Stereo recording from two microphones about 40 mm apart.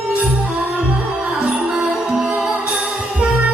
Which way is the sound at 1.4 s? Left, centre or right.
Centre.